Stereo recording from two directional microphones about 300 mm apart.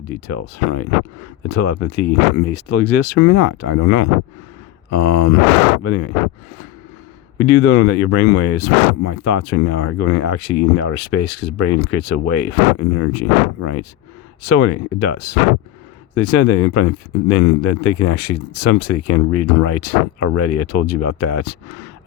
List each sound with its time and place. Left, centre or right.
0.3 s speech: left
7.3 s speech: left